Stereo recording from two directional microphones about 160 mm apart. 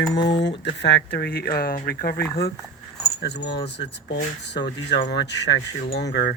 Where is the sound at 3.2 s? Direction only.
90° left.